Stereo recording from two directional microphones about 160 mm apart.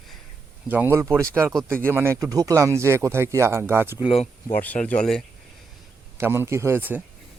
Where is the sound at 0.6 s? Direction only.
10° right (ahead or behind).